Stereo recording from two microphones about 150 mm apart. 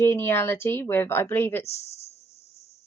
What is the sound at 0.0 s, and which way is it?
A woman's voice, 15° left (ahead or behind).